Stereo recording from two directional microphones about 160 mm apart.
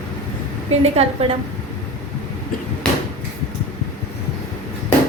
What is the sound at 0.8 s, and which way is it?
Speech, 40° right (ahead or behind).